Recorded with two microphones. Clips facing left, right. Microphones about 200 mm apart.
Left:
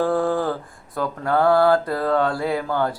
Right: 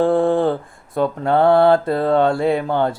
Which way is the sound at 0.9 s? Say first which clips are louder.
Right 5 dB; 25° right (ahead or behind).